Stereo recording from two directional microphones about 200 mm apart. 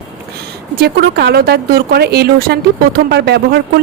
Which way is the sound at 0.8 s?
50° right (ahead or behind).